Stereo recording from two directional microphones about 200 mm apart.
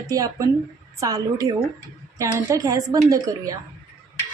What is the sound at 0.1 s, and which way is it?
A woman's voice, 15° right (ahead or behind).